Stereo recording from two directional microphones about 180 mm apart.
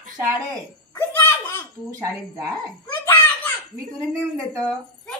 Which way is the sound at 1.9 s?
15° right (ahead or behind).